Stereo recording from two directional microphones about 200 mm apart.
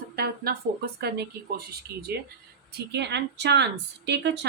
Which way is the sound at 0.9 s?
55° right (ahead or behind).